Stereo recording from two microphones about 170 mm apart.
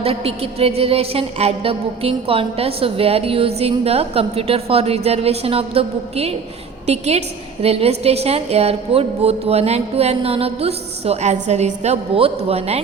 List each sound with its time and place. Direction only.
0.0 s music: 35° right (ahead or behind)